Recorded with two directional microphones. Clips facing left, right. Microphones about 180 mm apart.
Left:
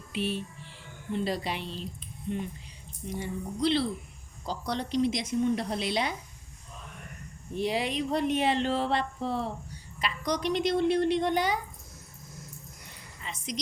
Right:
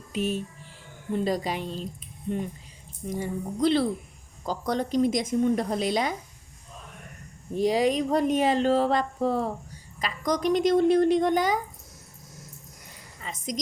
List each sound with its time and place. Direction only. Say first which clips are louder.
0.1 s music: right 3 dB; 45° right (ahead or behind)
1.1 s speech: right 4 dB; 45° right (ahead or behind)
7.5 s speech: right 7 dB; 40° right (ahead or behind)
13.2 s a woman's voice: right 4 dB; 45° right (ahead or behind)